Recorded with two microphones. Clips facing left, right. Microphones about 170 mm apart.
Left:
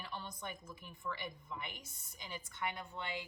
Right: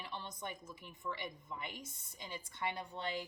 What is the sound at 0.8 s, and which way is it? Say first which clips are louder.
A woman's voice: even; 25° right (ahead or behind).